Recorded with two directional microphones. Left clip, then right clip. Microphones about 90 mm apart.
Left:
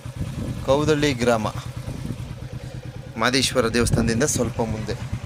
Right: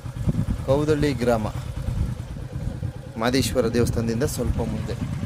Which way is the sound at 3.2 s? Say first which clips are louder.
Left 2 dB; 15° right (ahead or behind).